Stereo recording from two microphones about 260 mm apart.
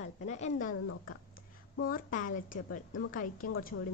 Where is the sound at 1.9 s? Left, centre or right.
Left.